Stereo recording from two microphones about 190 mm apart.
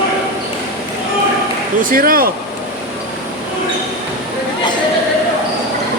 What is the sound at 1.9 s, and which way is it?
Speech, 50° right (ahead or behind).